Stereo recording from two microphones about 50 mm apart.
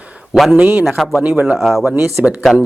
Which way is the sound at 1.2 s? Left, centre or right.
Right.